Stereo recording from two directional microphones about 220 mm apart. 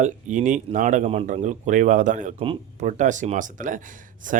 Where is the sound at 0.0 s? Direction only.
35° right (ahead or behind).